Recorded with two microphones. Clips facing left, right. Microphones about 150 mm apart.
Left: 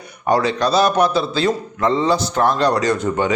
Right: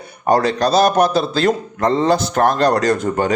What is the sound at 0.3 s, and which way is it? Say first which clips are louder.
A man's voice: right 2 dB; 45° right (ahead or behind).